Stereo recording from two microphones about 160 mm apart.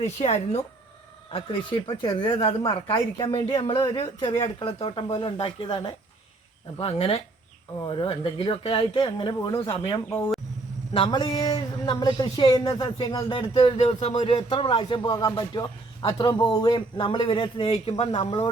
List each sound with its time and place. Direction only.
0.0 s speech: 45° left (ahead or behind)
1.9 s speech: 30° left (ahead or behind)